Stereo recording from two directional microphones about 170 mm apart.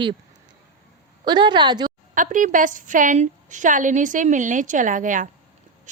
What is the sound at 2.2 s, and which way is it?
A woman's voice, 50° right (ahead or behind).